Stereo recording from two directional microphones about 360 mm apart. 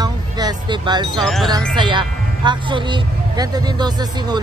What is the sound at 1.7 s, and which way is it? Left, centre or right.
Speech, centre.